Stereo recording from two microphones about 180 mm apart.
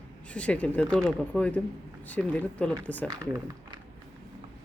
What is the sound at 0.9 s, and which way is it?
Speech, 5° left (ahead or behind).